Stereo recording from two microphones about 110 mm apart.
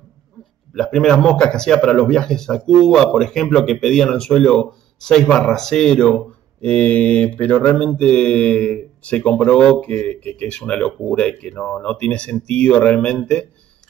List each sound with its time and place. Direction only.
0.7 s a man's voice: 5° left (ahead or behind)